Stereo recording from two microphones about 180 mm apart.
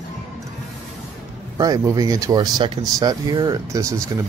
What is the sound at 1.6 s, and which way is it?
Speech, 20° right (ahead or behind).